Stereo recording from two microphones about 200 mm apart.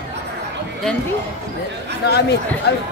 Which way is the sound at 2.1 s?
55° left (ahead or behind).